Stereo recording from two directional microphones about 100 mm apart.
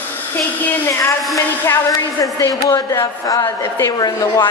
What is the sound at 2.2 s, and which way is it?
A woman's voice, 35° left (ahead or behind).